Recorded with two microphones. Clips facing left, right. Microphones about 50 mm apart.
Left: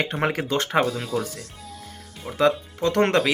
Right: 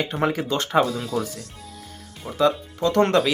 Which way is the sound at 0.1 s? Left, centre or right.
Left.